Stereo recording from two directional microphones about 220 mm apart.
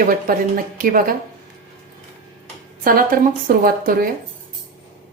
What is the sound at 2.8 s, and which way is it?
Speech, 40° right (ahead or behind).